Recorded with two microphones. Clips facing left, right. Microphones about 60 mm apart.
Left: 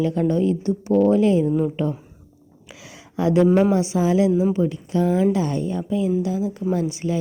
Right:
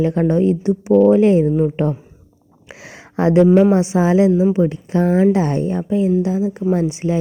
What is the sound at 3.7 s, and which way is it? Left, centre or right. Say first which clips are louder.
A woman's voice: right 4 dB; right.